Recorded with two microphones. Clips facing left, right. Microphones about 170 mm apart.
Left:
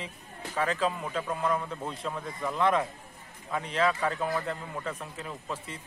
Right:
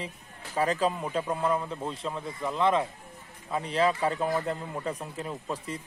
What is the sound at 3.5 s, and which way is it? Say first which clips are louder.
Speech: right 2 dB; 35° right (ahead or behind).